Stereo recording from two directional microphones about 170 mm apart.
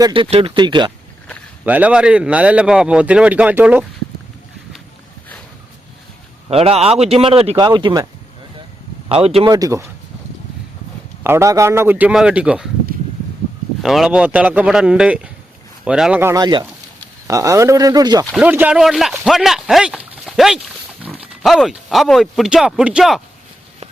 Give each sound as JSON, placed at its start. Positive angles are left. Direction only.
{"t": 0.0, "sound": "speech", "side_deg": -30}
{"t": 1.6, "sound": "a man's voice", "side_deg": -10}
{"t": 6.5, "sound": "speech", "side_deg": -35}
{"t": 9.0, "sound": "speech", "side_deg": -35}
{"t": 9.5, "sound": "speech", "side_deg": -20}
{"t": 11.2, "sound": "a man's voice", "side_deg": -15}
{"t": 13.8, "sound": "a man's voice", "side_deg": -5}
{"t": 16.3, "sound": "speech", "side_deg": -25}
{"t": 18.3, "sound": "a man's voice", "side_deg": -10}